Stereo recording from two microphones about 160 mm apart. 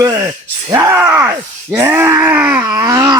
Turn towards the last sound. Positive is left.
turn(degrees=-25)  # may be behind; listen again after turning